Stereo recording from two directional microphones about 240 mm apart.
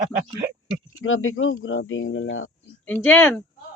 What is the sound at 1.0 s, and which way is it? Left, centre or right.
Speech, left.